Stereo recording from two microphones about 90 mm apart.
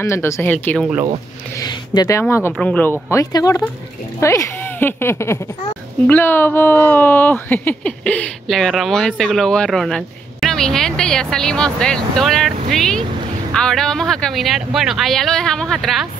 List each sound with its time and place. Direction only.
0.0 s speech: 30° left (ahead or behind)
1.6 s a sound: 45° left (ahead or behind)
2.1 s speech: 30° left (ahead or behind)
2.6 s speech: 15° left (ahead or behind)
2.9 s speech: 30° left (ahead or behind); by 8.3 s 15° left (ahead or behind)
8.5 s speech: centre (ahead or behind)